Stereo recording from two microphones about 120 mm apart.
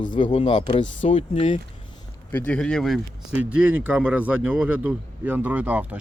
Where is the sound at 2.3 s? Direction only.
15° left (ahead or behind).